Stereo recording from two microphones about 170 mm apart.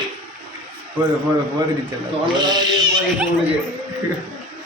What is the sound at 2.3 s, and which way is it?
Speech, 25° right (ahead or behind).